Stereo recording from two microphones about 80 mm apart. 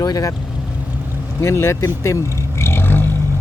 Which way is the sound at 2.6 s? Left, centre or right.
Left.